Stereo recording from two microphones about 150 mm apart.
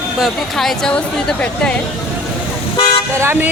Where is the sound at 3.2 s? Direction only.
15° right (ahead or behind).